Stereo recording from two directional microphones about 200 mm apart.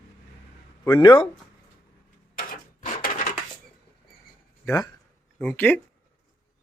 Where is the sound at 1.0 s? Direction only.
25° left (ahead or behind).